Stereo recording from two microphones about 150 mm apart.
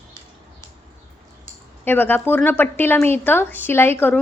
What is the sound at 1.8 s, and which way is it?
A woman's voice, 15° left (ahead or behind).